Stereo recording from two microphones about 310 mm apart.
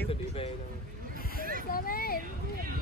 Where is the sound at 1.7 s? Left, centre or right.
Left.